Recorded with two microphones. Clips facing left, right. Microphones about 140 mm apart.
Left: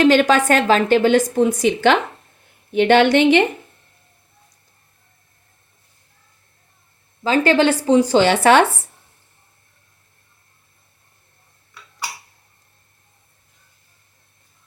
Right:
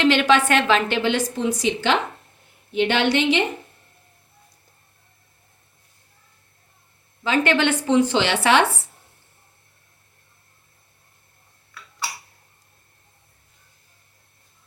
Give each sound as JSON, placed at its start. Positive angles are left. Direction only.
{"t": 0.0, "sound": "a woman's voice", "side_deg": 40}
{"t": 7.3, "sound": "speech", "side_deg": 35}